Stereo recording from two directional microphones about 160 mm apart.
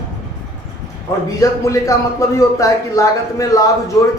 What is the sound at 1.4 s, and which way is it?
Speech, 20° left (ahead or behind).